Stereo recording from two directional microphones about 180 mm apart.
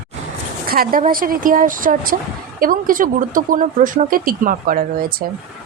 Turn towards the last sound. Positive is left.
turn(degrees=-55)  # may be behind; listen again after turning